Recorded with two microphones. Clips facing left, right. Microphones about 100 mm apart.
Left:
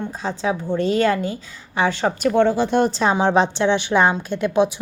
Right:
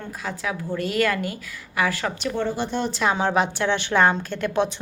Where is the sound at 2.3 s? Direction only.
65° left (ahead or behind).